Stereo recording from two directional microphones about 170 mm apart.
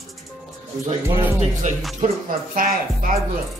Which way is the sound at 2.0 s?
45° right (ahead or behind).